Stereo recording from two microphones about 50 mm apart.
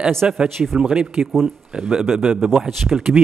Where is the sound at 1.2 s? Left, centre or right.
Centre.